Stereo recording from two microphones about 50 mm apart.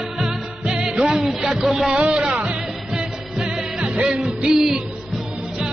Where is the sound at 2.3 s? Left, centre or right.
Right.